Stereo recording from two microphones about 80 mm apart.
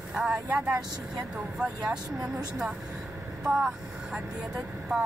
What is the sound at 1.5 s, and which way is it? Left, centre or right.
Speech, centre.